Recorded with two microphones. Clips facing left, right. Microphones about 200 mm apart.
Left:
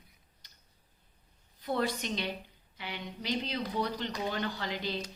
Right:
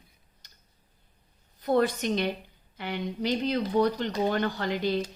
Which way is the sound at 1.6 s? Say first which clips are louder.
Right 8 dB; 50° right (ahead or behind).